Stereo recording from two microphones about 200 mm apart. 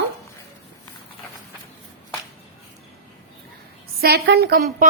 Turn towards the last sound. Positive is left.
turn(degrees=-50)  # may be behind; listen again after turning